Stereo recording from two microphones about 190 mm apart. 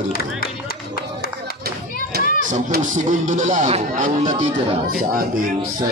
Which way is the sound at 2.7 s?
45° right (ahead or behind).